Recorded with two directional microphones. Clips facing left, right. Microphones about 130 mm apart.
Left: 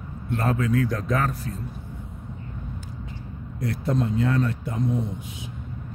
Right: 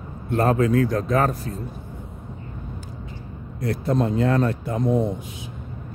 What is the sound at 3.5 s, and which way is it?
A man's voice, 40° right (ahead or behind).